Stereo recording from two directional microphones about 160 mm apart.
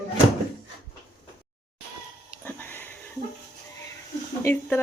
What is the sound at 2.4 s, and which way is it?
Sniff, 10° left (ahead or behind).